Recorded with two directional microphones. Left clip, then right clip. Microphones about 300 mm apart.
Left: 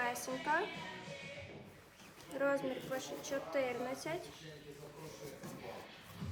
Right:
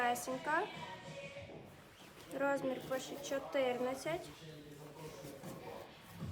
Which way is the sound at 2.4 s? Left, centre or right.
Centre.